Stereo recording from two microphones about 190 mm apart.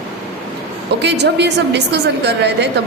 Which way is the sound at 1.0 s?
65° right (ahead or behind).